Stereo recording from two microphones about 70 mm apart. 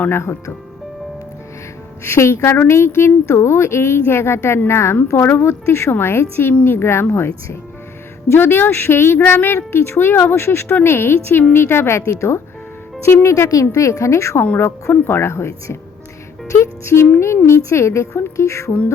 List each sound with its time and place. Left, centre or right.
0.1 s a woman's voice: left
2.0 s a woman's voice: left